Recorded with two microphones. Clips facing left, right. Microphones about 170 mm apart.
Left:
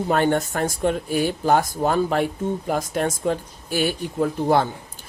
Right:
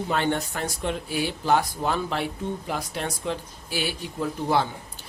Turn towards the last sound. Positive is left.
turn(degrees=50)  # may be behind; listen again after turning